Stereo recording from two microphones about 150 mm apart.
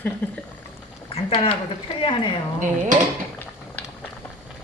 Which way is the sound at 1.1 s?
40° left (ahead or behind).